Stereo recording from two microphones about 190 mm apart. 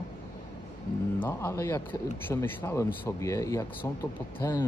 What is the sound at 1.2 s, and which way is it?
Speech, 15° left (ahead or behind).